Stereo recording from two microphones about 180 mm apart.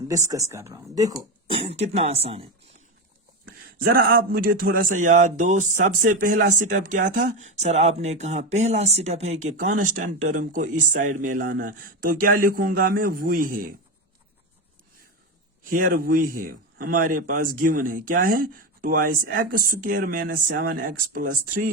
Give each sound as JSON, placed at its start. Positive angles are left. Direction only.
{"t": 0.1, "sound": "speech", "side_deg": -20}
{"t": 1.5, "sound": "speech", "side_deg": -30}
{"t": 3.4, "sound": "speech", "side_deg": -55}
{"t": 15.7, "sound": "speech", "side_deg": -50}